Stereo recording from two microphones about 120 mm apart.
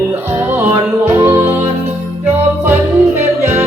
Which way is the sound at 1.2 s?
20° right (ahead or behind).